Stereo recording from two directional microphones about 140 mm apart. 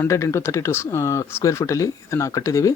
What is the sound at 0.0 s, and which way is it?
Speech, 20° left (ahead or behind).